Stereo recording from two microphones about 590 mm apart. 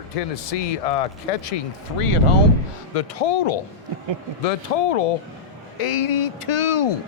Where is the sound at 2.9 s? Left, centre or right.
Left.